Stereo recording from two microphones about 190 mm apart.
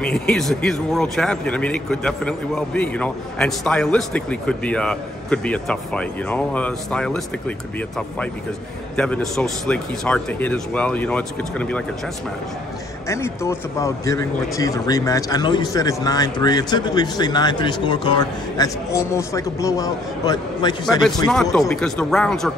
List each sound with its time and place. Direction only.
0.0 s a man's voice: 5° left (ahead or behind)
8.9 s a man's voice: 5° left (ahead or behind)
13.1 s speech: 15° left (ahead or behind)
21.3 s a man's voice: centre (ahead or behind)